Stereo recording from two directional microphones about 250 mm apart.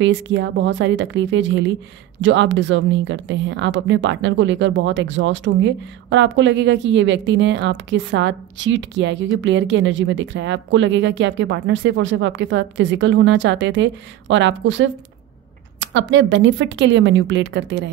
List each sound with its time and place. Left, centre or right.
0.0 s speech: right